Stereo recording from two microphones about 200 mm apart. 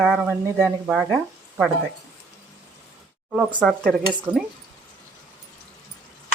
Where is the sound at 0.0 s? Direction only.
Centre (ahead or behind).